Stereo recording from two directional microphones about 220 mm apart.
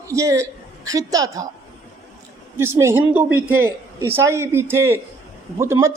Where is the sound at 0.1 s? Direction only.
15° right (ahead or behind).